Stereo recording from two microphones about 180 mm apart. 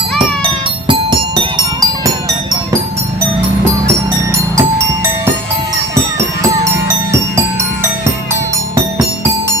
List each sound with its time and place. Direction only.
0.2 s music: 25° right (ahead or behind)